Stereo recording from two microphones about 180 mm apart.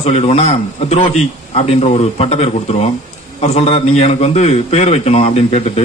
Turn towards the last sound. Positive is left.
turn(degrees=35)  # may be behind; listen again after turning